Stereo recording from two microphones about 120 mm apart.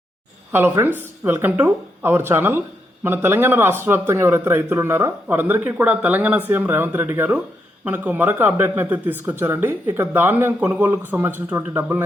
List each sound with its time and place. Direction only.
0.5 s speech: 20° right (ahead or behind)